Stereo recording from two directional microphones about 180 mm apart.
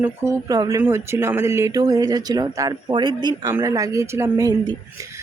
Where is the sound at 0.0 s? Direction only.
15° right (ahead or behind).